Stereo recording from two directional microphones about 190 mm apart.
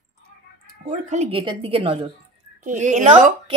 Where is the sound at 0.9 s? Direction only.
40° right (ahead or behind).